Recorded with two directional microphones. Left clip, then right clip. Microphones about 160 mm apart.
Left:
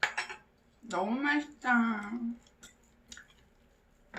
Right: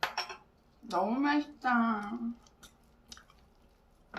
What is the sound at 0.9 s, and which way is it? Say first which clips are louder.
Speech: right 1 dB; 10° right (ahead or behind).